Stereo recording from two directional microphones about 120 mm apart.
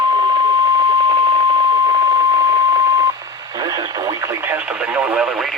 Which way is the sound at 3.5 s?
35° right (ahead or behind).